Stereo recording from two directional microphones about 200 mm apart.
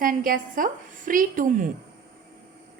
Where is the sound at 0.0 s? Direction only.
45° right (ahead or behind).